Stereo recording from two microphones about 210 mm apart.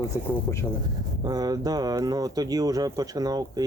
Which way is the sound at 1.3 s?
20° right (ahead or behind).